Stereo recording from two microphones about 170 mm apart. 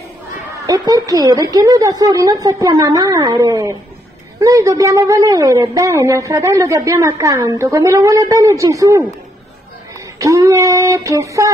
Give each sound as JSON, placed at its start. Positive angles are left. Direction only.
{"t": 0.7, "sound": "speech", "side_deg": -20}
{"t": 10.1, "sound": "speech", "side_deg": -20}